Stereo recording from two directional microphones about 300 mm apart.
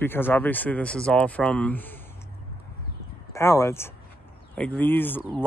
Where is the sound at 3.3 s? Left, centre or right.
Centre.